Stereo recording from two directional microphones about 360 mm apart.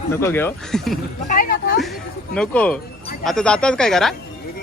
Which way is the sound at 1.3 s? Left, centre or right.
Left.